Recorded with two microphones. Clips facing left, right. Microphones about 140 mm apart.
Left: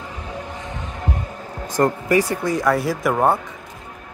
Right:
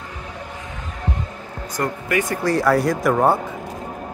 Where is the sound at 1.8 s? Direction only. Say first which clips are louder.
Left 5 dB; 35° left (ahead or behind).